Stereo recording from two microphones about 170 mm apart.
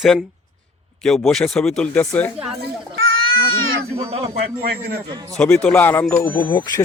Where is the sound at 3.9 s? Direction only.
35° right (ahead or behind).